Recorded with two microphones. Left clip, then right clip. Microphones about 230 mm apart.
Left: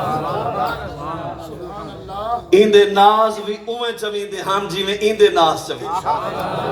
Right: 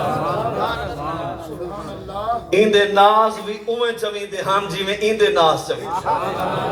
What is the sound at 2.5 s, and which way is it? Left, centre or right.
A man's voice, left.